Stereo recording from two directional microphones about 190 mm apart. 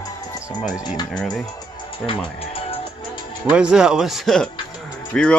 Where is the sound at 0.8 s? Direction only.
25° left (ahead or behind).